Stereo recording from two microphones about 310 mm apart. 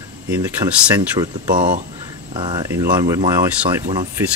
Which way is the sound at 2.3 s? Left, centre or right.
Centre.